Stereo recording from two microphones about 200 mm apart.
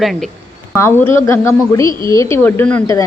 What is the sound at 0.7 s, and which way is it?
Speech, 10° left (ahead or behind).